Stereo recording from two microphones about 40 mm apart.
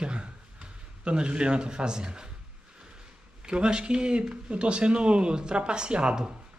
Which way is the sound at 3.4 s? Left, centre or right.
Right.